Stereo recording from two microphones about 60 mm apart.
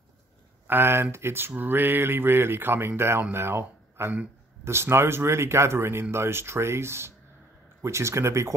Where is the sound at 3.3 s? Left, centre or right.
Right.